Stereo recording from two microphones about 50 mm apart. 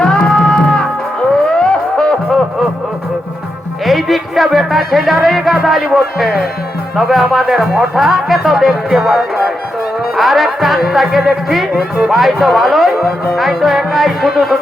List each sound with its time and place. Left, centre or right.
0.0 s music: centre
3.8 s speech: centre
5.6 s music: centre
9.0 s speech: centre
10.2 s music: centre
11.7 s speech: centre
12.1 s music: centre